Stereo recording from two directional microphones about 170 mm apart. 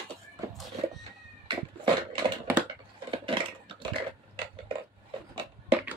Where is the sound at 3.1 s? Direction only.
30° right (ahead or behind).